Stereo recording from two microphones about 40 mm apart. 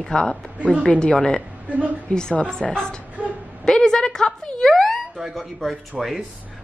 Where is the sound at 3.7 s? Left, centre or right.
Centre.